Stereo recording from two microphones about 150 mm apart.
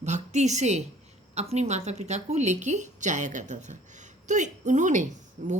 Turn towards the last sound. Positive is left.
turn(degrees=-60)  # may be behind; listen again after turning